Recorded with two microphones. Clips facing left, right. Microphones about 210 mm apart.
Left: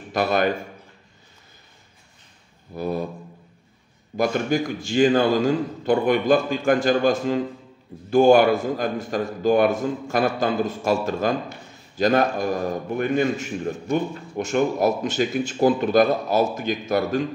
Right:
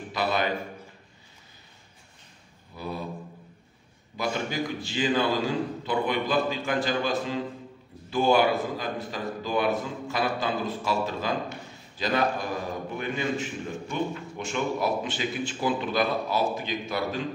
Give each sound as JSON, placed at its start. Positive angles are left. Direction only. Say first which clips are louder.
{"t": 0.1, "sound": "a man's voice", "louder": "left 6 dB", "side_deg": 50}
{"t": 2.7, "sound": "a man's voice", "louder": "left 9 dB", "side_deg": 45}
{"t": 4.2, "sound": "a man's voice", "louder": "left 8 dB", "side_deg": 50}